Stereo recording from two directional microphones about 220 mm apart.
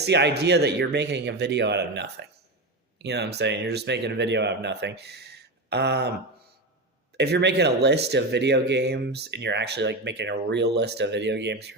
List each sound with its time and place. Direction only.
0.0 s speech: 50° right (ahead or behind)
7.2 s speech: 50° right (ahead or behind)